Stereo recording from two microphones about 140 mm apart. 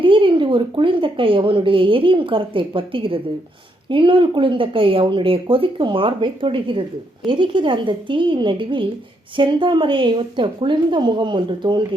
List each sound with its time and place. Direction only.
0.0 s speech: 40° right (ahead or behind)